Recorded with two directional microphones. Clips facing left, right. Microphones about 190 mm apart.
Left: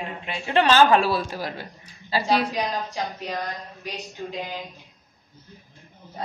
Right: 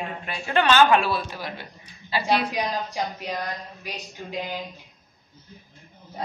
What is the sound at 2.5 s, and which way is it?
Speech, 15° right (ahead or behind).